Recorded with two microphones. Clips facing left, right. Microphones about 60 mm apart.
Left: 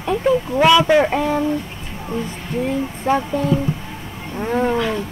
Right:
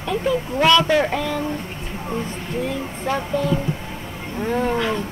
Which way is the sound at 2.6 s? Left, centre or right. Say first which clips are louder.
Left 7 dB; left.